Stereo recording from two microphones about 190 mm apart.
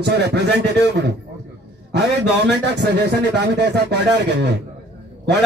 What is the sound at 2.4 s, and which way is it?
Speech, 60° right (ahead or behind).